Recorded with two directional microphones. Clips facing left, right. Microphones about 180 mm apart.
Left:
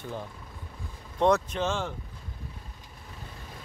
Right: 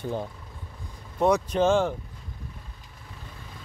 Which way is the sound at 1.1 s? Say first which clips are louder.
Right 1 dB; 10° right (ahead or behind).